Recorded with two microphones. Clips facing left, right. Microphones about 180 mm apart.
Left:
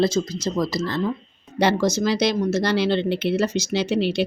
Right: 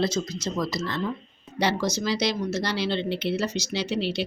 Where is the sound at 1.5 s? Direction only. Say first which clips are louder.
Left 6 dB; 50° left (ahead or behind).